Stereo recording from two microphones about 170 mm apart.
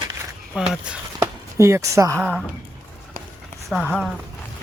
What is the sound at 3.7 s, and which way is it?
Speech, 5° left (ahead or behind).